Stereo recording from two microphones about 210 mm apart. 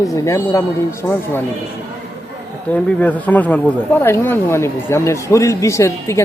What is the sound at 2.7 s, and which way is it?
Speech, 5° left (ahead or behind).